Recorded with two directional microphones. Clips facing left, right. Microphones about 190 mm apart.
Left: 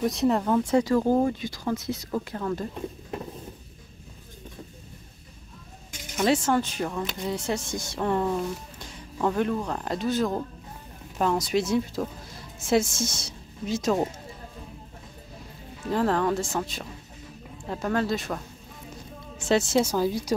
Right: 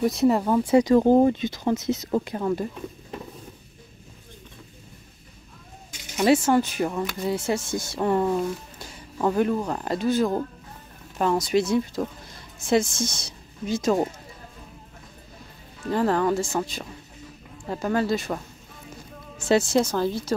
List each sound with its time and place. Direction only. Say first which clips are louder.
0.0 s speech: right 3 dB; centre (ahead or behind)
6.1 s a woman's voice: right 4 dB; 5° right (ahead or behind)
15.9 s speech: right 2 dB; centre (ahead or behind)